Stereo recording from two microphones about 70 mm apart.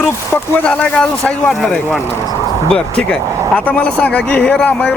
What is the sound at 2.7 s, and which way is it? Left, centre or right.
Speech, centre.